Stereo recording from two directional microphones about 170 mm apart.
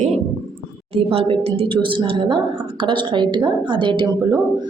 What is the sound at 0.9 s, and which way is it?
A woman's voice, 35° right (ahead or behind).